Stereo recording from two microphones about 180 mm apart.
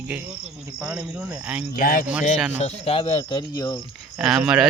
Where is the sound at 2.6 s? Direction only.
35° left (ahead or behind); by 3.8 s 20° left (ahead or behind).